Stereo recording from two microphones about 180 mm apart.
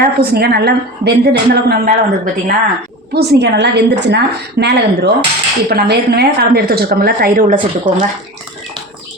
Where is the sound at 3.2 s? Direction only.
70° right (ahead or behind); by 7.6 s 50° right (ahead or behind).